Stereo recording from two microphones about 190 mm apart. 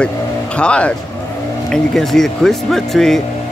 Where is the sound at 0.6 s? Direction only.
5° left (ahead or behind).